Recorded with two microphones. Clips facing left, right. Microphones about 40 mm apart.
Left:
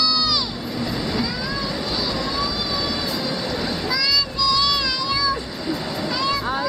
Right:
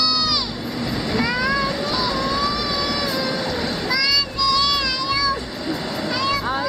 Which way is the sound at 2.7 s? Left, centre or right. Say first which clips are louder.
Right 2 dB; right.